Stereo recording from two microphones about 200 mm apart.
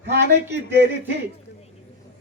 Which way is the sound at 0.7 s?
55° right (ahead or behind).